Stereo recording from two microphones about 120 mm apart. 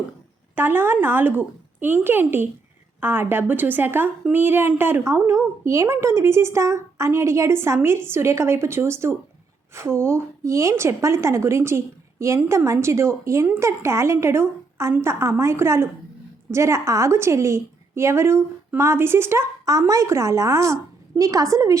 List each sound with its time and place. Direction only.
0.5 s a woman's voice: 15° right (ahead or behind)